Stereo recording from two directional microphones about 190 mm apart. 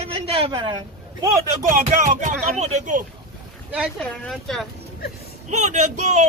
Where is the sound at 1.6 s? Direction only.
45° right (ahead or behind).